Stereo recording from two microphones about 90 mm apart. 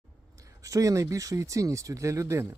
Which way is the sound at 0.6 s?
40° right (ahead or behind).